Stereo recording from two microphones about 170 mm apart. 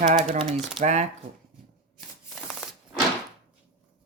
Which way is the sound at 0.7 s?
45° right (ahead or behind).